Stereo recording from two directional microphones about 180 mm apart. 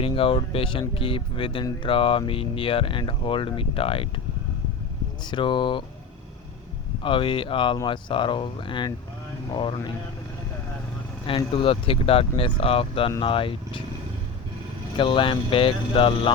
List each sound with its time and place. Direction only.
0.0 s speech: 30° left (ahead or behind)
5.2 s speech: 25° left (ahead or behind)
7.0 s speech: 30° left (ahead or behind)
11.3 s speech: 30° left (ahead or behind)
14.9 s speech: 25° left (ahead or behind)